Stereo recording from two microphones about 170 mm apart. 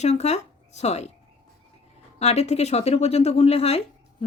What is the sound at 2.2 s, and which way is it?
Speech, 40° left (ahead or behind).